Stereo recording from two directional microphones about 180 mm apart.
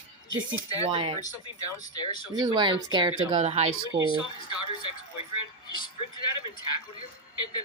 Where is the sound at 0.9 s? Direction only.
30° right (ahead or behind).